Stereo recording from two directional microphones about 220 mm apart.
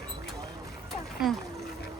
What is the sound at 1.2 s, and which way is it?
Speech, centre (ahead or behind).